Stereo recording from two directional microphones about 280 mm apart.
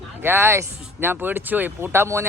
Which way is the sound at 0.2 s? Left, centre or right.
Centre.